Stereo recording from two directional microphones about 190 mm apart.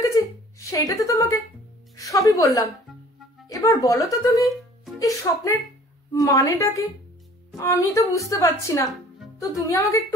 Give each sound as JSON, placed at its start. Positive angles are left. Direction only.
{"t": 0.1, "sound": "a sound", "side_deg": 15}
{"t": 2.0, "sound": "a woman's voice", "side_deg": 15}
{"t": 4.3, "sound": "music", "side_deg": 0}
{"t": 4.9, "sound": "a woman's voice", "side_deg": 15}